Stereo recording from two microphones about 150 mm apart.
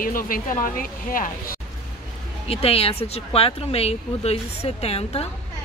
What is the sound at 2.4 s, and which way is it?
Speech, 40° left (ahead or behind).